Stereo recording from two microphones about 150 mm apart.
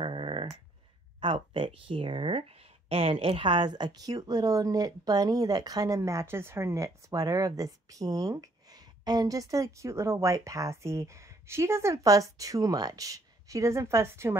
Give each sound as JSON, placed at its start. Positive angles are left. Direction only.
{"t": 0.0, "sound": "dog", "side_deg": -35}
{"t": 1.2, "sound": "speech", "side_deg": -35}